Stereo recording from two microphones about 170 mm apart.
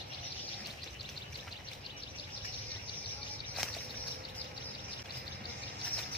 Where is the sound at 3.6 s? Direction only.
Centre (ahead or behind).